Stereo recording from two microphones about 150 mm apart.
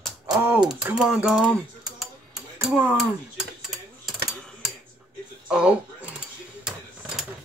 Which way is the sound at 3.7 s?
Centre (ahead or behind).